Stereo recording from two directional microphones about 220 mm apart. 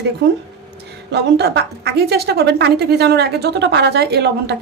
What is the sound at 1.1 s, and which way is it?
A woman's voice, 50° right (ahead or behind).